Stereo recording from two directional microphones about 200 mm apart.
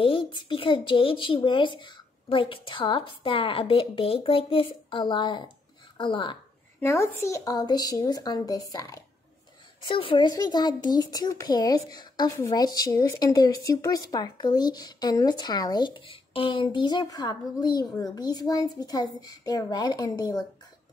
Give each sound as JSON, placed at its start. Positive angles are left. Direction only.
{"t": 0.0, "sound": "a child's voice", "side_deg": 25}
{"t": 6.8, "sound": "a woman's voice", "side_deg": 15}